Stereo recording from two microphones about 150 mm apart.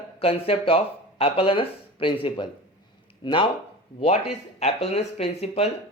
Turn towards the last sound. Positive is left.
turn(degrees=45)  # may be behind; listen again after turning